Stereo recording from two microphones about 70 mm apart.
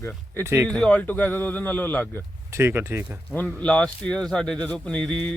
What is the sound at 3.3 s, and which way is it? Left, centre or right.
Speech, centre.